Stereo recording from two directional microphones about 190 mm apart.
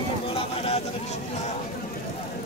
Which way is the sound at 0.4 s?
30° left (ahead or behind).